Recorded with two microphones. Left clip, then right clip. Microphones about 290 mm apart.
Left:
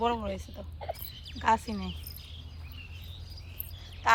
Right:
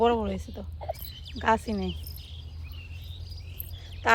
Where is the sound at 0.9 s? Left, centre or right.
Left.